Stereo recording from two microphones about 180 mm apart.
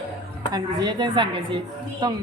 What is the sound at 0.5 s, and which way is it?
A woman's voice, 25° right (ahead or behind).